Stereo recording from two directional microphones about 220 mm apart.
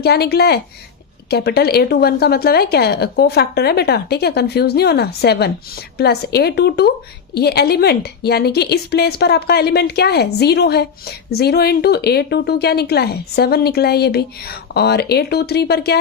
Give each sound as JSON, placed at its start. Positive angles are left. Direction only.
{"t": 0.0, "sound": "a woman's voice", "side_deg": 45}